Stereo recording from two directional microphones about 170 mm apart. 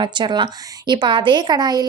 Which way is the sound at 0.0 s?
25° right (ahead or behind).